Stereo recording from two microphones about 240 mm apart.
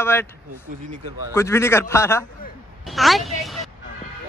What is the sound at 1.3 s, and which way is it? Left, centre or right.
Speech, centre.